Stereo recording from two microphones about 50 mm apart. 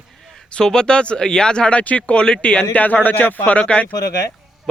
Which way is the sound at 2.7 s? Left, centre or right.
Left.